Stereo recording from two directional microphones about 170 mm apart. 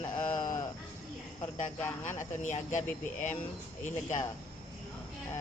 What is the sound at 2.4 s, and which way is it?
Speech, 45° left (ahead or behind).